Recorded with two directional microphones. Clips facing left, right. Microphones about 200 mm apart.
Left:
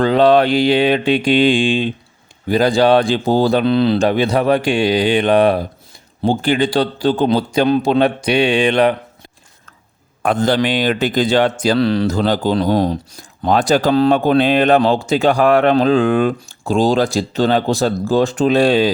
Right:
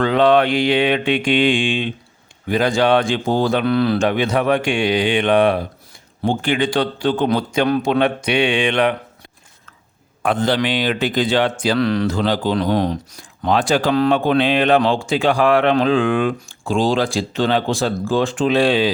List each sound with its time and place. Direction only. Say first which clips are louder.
0.0 s speech: left 3 dB; 35° left (ahead or behind)
10.2 s speech: left 3 dB; 45° left (ahead or behind)